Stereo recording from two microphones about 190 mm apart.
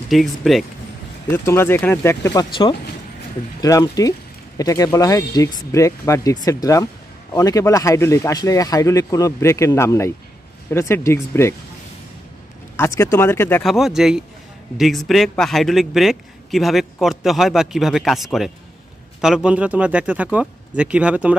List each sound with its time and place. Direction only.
0.1 s a man's voice: centre (ahead or behind)
1.3 s speech: 15° left (ahead or behind)
3.6 s speech: 20° left (ahead or behind)
12.7 s speech: 15° left (ahead or behind)
13.7 s a man's voice: centre (ahead or behind)